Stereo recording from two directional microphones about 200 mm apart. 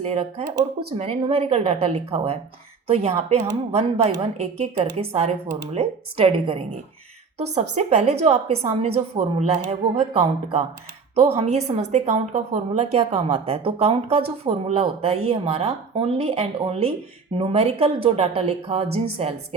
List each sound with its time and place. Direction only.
0.0 s a woman's voice: 30° right (ahead or behind)